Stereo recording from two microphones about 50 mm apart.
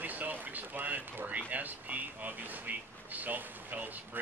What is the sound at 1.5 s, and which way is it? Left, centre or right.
Speech, right.